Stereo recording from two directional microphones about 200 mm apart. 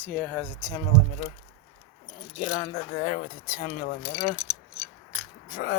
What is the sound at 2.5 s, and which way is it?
Speech, 25° left (ahead or behind).